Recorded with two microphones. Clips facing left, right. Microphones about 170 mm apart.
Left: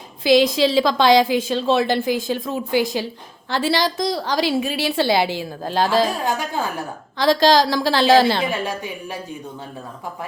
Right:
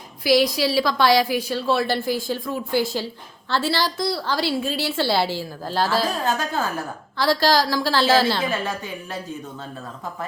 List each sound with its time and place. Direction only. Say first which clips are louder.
0.3 s a woman's voice: left 3 dB; 20° left (ahead or behind)